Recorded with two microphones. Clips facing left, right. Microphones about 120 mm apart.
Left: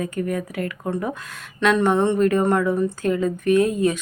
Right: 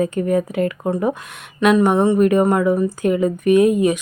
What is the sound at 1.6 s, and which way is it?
A woman's voice, 15° right (ahead or behind).